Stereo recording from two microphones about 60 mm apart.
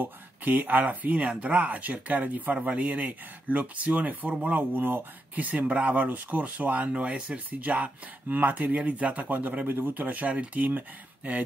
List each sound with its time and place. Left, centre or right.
0.0 s speech: right